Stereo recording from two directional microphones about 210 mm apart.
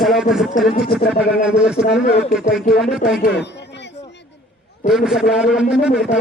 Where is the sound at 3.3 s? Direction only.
55° left (ahead or behind).